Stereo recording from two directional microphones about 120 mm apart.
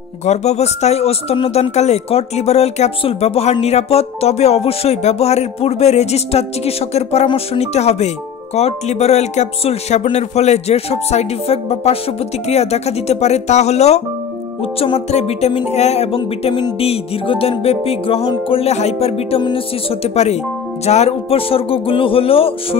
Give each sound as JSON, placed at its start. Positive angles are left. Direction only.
{"t": 0.2, "sound": "speech", "side_deg": 70}
{"t": 14.6, "sound": "speech", "side_deg": 55}